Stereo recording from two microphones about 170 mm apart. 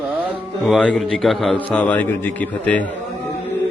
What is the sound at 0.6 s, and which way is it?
A man's voice, 5° left (ahead or behind).